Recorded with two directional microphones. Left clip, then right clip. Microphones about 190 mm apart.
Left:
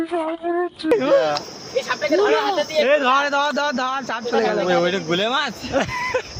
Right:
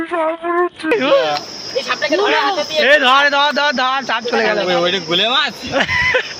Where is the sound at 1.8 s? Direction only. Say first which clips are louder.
Right 3 dB; 50° left (ahead or behind).